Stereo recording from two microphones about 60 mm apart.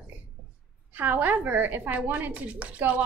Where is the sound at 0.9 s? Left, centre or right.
Right.